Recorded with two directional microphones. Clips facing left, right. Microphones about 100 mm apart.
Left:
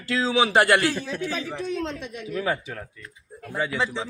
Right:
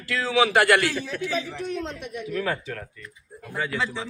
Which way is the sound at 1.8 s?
90° left.